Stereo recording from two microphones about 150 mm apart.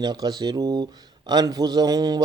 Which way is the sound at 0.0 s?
25° right (ahead or behind).